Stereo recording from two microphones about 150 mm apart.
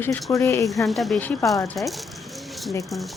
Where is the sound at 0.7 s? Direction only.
Centre (ahead or behind).